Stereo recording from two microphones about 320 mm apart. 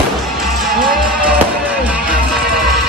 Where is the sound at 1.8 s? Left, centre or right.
Centre.